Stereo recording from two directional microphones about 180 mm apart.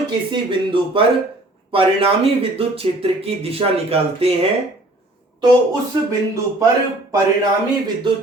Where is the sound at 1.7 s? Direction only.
30° right (ahead or behind).